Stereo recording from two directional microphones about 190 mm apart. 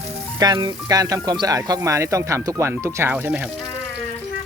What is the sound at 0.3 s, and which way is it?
Speech, 20° right (ahead or behind).